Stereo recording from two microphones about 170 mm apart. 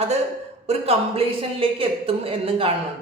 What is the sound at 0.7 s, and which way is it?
Speech, 35° right (ahead or behind).